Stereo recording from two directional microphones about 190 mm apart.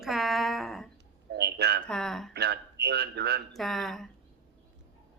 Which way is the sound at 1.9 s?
5° left (ahead or behind).